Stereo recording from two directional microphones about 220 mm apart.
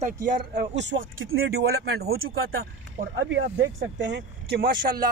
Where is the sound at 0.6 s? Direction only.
55° right (ahead or behind).